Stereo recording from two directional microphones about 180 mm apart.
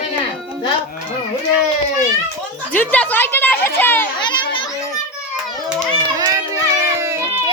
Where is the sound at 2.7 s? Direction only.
10° left (ahead or behind).